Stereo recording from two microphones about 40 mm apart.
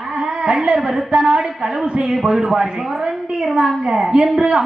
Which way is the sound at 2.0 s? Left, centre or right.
Centre.